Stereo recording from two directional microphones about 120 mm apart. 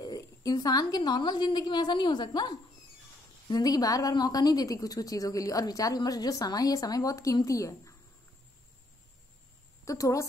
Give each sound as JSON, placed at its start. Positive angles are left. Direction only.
{"t": 0.0, "sound": "a woman's voice", "side_deg": 30}
{"t": 9.8, "sound": "a woman's voice", "side_deg": 25}